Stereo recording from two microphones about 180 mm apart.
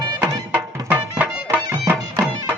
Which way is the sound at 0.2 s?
10° right (ahead or behind).